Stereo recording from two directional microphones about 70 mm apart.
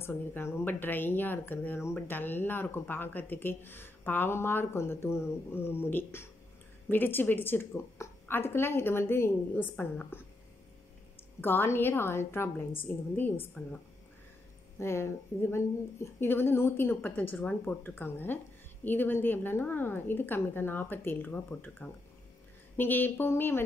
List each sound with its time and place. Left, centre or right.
0.0 s a woman's voice: left
11.4 s speech: left
14.8 s a woman's voice: left